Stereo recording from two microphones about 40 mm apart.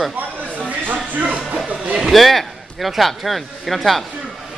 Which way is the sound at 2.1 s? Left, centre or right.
Centre.